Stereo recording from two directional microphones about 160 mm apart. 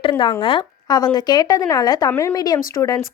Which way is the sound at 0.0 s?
30° left (ahead or behind).